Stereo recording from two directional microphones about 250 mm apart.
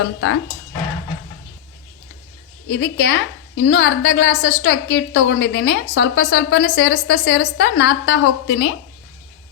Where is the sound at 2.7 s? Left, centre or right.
Left.